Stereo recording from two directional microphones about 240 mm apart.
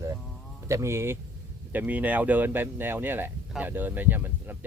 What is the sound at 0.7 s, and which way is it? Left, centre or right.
Speech, centre.